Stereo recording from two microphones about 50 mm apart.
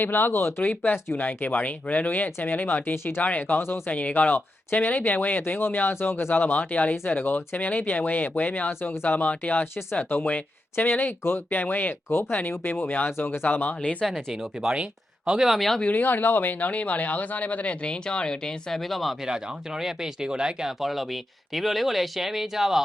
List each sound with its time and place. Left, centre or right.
0.0 s speech: left
9.9 s speech: left
10.2 s speech: left
14.0 s speech: centre
15.3 s speech: centre
15.5 s speech: centre
15.8 s speech: left; by 18.8 s centre
18.9 s speech: centre
19.8 s speech: centre
20.7 s speech: centre